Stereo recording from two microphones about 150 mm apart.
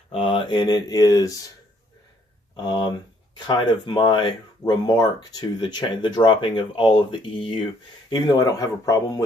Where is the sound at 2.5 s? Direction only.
30° left (ahead or behind).